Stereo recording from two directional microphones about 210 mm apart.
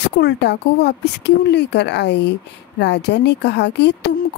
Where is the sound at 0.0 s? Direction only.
55° left (ahead or behind).